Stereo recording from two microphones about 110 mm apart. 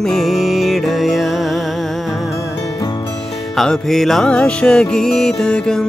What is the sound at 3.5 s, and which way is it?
Music, 5° left (ahead or behind).